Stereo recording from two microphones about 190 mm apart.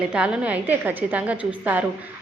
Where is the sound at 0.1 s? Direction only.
5° right (ahead or behind).